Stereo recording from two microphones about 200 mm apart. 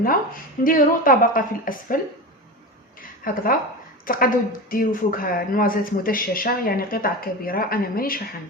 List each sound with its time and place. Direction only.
0.6 s speech: 45° left (ahead or behind)
3.0 s a sound: 45° left (ahead or behind)
4.0 s a woman's voice: 45° left (ahead or behind)